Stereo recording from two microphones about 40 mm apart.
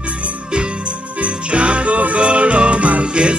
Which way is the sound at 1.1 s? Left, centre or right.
Right.